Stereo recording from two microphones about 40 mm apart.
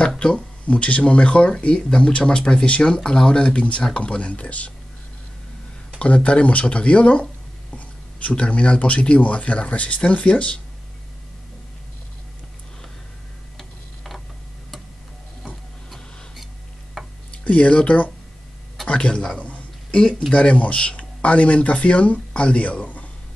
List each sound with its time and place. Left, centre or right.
0.2 s speech: left
5.9 s speech: left
7.7 s a sound: left
9.2 s speech: left
13.6 s tick-tock: centre
17.5 s a man's voice: left
19.9 s speech: left
20.5 s speech: left